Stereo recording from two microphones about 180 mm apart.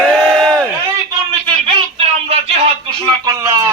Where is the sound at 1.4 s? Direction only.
30° right (ahead or behind).